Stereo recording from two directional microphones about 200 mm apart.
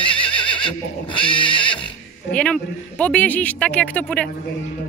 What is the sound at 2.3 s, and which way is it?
Speech, 5° left (ahead or behind).